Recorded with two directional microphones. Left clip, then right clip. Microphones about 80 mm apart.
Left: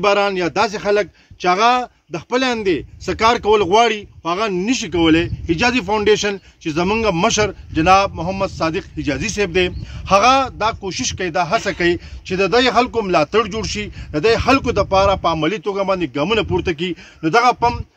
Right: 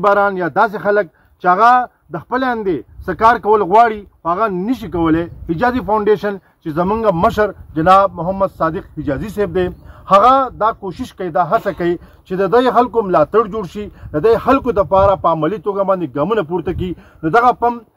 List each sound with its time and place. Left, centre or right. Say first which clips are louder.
0.1 s a man's voice: right 3 dB; centre
4.6 s speech: left 1 dB; centre
6.7 s speech: right 2 dB; centre
12.3 s speech: right 2 dB; right
14.7 s speech: right 3 dB; right
16.5 s speech: left 1 dB; right